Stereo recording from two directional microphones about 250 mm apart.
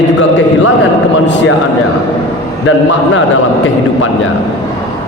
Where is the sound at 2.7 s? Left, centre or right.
Left.